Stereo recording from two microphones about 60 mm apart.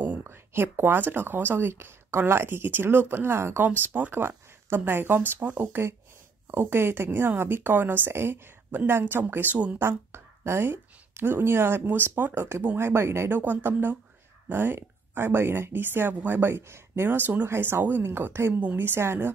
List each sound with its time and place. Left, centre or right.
0.2 s speech: right
3.8 s speech: right
9.8 s speech: right
13.3 s speech: right
18.5 s speech: right
18.8 s speech: right